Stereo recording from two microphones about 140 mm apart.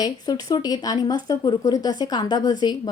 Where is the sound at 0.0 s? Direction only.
25° left (ahead or behind).